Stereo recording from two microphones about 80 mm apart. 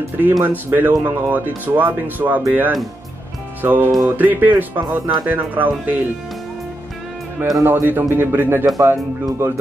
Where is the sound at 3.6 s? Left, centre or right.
Right.